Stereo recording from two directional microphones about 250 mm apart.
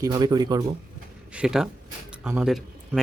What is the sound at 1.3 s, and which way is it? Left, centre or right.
Speech, centre.